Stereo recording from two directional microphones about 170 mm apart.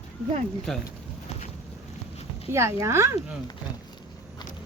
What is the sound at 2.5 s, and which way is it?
Speech, 15° right (ahead or behind).